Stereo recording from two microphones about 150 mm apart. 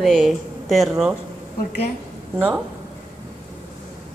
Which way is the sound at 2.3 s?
10° right (ahead or behind).